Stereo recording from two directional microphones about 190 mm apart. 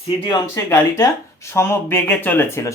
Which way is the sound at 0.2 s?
20° left (ahead or behind).